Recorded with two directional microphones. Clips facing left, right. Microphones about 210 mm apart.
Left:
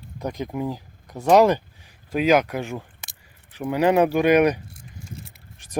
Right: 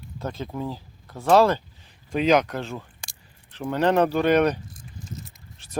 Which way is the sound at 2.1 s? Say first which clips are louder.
Left 1 dB; 5° left (ahead or behind).